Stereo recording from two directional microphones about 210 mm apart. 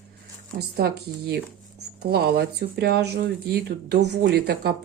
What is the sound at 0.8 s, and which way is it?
Speech, 50° right (ahead or behind).